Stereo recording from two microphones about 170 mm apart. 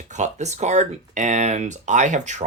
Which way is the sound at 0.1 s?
45° right (ahead or behind).